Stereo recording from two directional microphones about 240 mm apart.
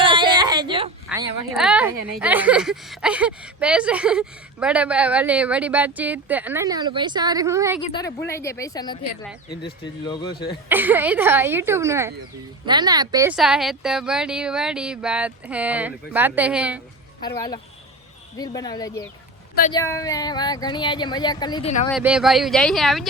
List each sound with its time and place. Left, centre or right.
0.0 s a sound: centre
1.1 s a sound: centre
1.5 s speech: centre
7.8 s speech: left
10.7 s speech: centre
13.3 s speech: centre
17.2 s speech: centre
21.8 s speech: centre